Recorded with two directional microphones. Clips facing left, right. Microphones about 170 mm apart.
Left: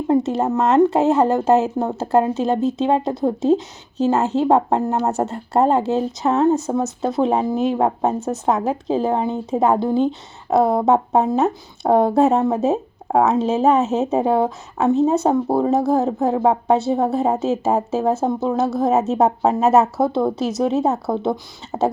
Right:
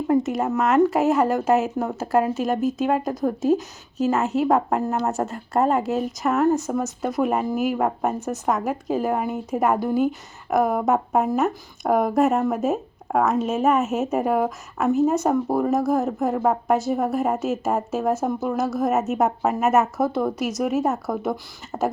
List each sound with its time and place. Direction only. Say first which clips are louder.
0.3 s a woman's voice: left 3 dB; 35° left (ahead or behind)